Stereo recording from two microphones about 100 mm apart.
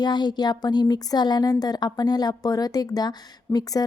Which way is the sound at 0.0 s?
45° left (ahead or behind).